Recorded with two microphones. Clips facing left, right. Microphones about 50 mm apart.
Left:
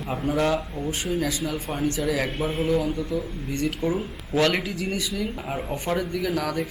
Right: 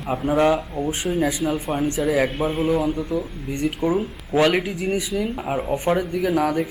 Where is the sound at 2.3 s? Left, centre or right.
Centre.